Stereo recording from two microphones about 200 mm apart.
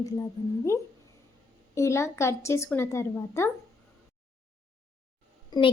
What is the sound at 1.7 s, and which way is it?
A woman's voice, 15° left (ahead or behind).